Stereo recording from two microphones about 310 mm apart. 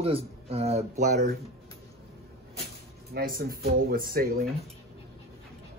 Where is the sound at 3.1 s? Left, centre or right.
Right.